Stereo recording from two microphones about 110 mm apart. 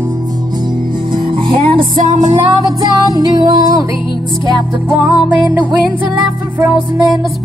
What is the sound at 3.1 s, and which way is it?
Music, 35° right (ahead or behind).